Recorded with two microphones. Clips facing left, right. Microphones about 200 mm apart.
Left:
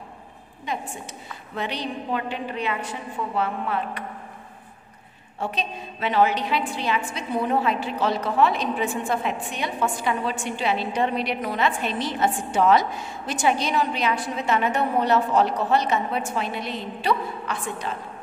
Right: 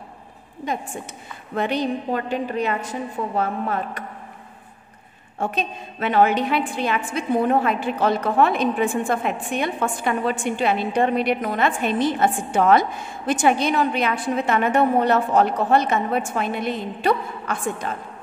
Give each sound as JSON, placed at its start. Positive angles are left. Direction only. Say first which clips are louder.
{"t": 0.7, "sound": "a woman's voice", "louder": "right 3 dB", "side_deg": -45}
{"t": 5.4, "sound": "a woman's voice", "louder": "right 3 dB", "side_deg": -50}